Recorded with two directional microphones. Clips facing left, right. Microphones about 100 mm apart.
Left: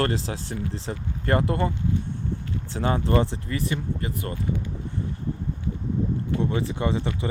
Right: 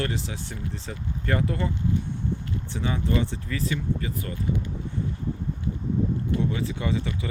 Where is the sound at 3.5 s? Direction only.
30° left (ahead or behind).